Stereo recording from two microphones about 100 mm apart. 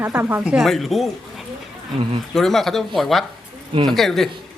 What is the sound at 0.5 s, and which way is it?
Speech, centre (ahead or behind).